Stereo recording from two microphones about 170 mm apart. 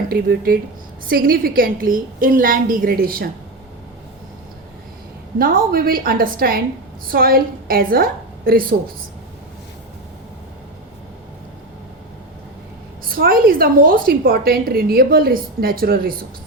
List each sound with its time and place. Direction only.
0.1 s a woman's voice: 65° right (ahead or behind)
5.4 s a woman's voice: 60° right (ahead or behind)
13.1 s a woman's voice: 60° right (ahead or behind)